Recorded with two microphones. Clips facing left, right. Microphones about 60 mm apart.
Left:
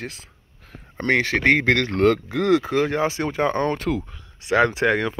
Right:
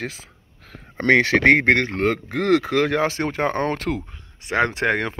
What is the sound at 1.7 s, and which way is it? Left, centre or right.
Speech, right.